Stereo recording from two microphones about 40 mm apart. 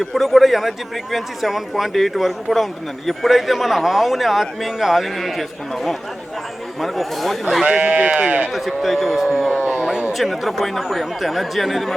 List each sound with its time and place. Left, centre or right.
0.0 s speech: centre
7.6 s speech: right
8.5 s speech: centre
9.8 s a sound: centre
10.1 s speech: centre